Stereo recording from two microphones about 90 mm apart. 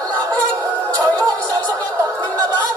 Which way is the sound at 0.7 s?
15° left (ahead or behind).